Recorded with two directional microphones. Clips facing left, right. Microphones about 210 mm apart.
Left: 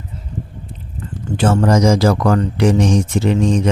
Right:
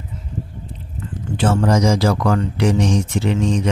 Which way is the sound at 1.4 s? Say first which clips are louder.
Left 3 dB; 45° left (ahead or behind).